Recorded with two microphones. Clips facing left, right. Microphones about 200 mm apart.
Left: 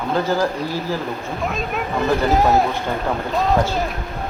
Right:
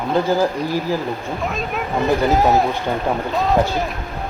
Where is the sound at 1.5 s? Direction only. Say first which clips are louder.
Left 1 dB; centre (ahead or behind).